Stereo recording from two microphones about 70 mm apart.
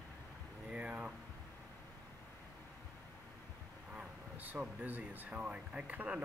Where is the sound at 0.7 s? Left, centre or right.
Centre.